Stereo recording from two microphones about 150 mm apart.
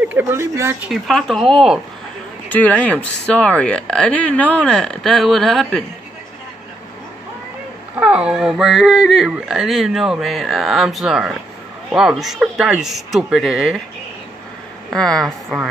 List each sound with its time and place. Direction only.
0.1 s speech: 15° right (ahead or behind)
0.8 s speech: centre (ahead or behind)
8.0 s speech: 5° right (ahead or behind)
14.9 s speech: centre (ahead or behind)